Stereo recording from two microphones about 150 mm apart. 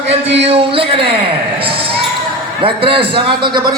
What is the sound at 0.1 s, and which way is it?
A man's voice, 40° right (ahead or behind).